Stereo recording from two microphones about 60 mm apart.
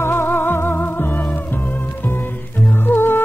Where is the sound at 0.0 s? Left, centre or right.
Left.